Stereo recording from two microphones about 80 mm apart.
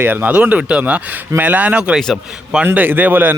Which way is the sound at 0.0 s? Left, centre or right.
Right.